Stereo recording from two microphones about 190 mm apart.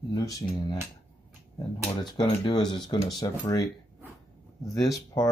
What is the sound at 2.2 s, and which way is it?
Speech, 25° left (ahead or behind).